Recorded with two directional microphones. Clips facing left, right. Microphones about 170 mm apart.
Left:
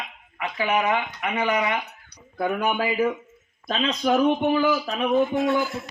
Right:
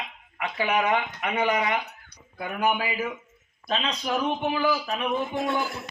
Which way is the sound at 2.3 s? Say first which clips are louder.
Left 2 dB; 40° left (ahead or behind).